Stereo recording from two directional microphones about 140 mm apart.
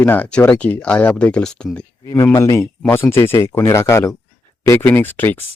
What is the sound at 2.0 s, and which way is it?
Speech, 20° left (ahead or behind).